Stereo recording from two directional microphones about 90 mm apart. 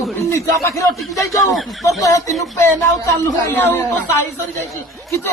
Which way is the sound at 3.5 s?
25° left (ahead or behind).